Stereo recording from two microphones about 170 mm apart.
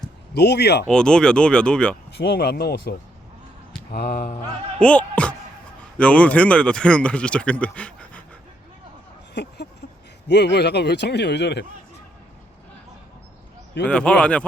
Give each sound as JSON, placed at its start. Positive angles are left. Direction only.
{"t": 0.3, "sound": "speech", "side_deg": 75}
{"t": 0.9, "sound": "speech", "side_deg": 5}
{"t": 2.1, "sound": "speech", "side_deg": 70}
{"t": 3.9, "sound": "mantra", "side_deg": 60}
{"t": 4.8, "sound": "speech", "side_deg": 5}
{"t": 9.3, "sound": "a sound", "side_deg": 85}
{"t": 10.2, "sound": "a man's voice", "side_deg": 85}
{"t": 13.8, "sound": "speech", "side_deg": 5}